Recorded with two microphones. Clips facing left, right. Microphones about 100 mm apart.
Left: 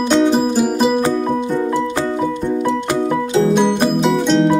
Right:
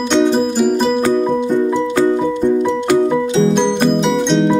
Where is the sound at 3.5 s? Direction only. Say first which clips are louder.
Even; 5° left (ahead or behind).